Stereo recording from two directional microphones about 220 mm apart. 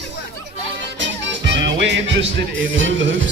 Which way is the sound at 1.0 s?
55° right (ahead or behind).